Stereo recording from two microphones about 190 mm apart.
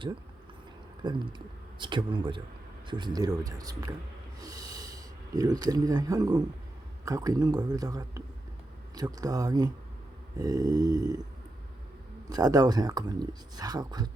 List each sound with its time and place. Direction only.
1.0 s speech: 25° right (ahead or behind)
4.4 s a sound: 20° right (ahead or behind)
7.0 s speech: 20° right (ahead or behind)
12.3 s speech: 20° right (ahead or behind)